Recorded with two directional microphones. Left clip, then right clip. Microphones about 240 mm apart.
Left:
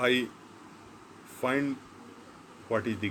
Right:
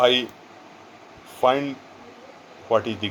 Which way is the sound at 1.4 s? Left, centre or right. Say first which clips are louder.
Right 10 dB; right.